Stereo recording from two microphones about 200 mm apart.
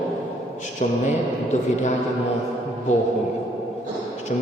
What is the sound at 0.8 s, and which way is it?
A man's voice, 35° left (ahead or behind).